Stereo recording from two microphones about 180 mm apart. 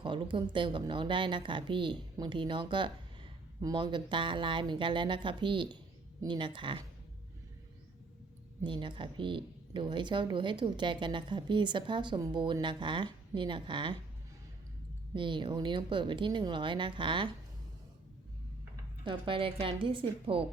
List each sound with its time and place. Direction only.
0.0 s speech: 25° right (ahead or behind)
8.6 s speech: 25° right (ahead or behind)
15.1 s speech: 25° right (ahead or behind)
19.0 s speech: 30° right (ahead or behind)